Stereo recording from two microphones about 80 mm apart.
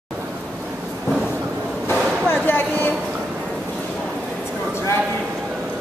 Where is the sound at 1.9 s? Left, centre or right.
Left.